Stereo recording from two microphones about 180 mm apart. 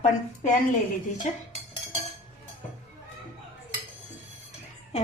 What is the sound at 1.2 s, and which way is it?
Speech, 40° left (ahead or behind).